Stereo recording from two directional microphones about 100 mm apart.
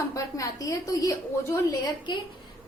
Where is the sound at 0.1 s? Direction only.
35° left (ahead or behind).